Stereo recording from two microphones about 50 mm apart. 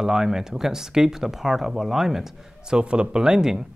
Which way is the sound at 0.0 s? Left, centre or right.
Centre.